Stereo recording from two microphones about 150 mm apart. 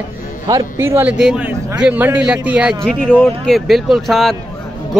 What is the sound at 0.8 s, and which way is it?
Speech, 15° right (ahead or behind).